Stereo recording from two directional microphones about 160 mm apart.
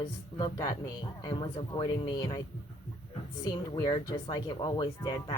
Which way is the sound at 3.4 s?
25° left (ahead or behind).